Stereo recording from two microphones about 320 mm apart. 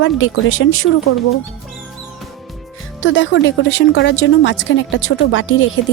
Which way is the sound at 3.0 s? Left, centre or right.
Left.